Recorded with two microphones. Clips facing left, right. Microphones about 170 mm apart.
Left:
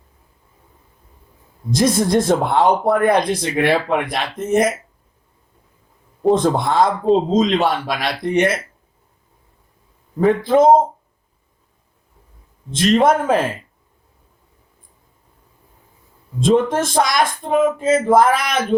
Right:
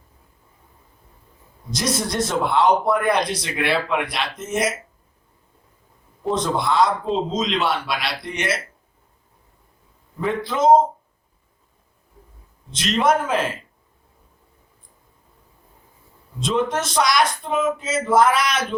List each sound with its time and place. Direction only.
1.7 s speech: 50° left (ahead or behind)
6.2 s speech: 50° left (ahead or behind)
10.2 s speech: 50° left (ahead or behind)
12.7 s speech: 50° left (ahead or behind)
16.4 s speech: 50° left (ahead or behind)